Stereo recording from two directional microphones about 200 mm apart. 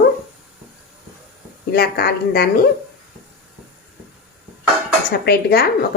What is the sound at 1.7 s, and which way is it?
Speech, 50° left (ahead or behind).